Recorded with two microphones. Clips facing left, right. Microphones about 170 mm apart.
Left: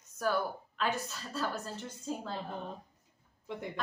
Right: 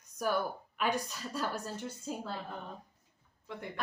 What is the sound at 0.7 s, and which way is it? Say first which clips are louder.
A woman's voice: right 2 dB; 15° right (ahead or behind).